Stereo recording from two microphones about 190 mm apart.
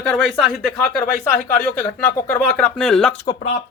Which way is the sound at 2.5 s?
5° left (ahead or behind).